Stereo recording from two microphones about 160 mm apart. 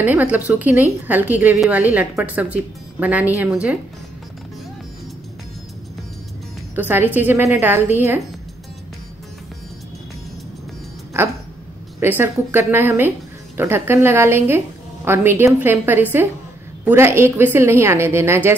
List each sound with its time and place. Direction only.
0.0 s a woman's voice: 10° right (ahead or behind)
6.7 s a woman's voice: 10° right (ahead or behind)
12.0 s a woman's voice: 15° right (ahead or behind)